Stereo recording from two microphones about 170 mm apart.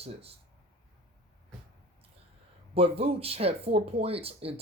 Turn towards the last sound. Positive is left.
turn(degrees=-35)  # may be behind; listen again after turning